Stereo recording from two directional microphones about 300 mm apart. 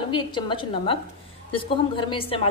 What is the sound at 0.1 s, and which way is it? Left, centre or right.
A woman's voice, centre.